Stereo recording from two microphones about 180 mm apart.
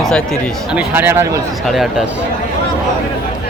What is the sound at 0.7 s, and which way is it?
Speech, 10° right (ahead or behind).